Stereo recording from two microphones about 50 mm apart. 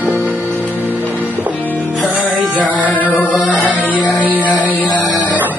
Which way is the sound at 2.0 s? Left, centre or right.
Right.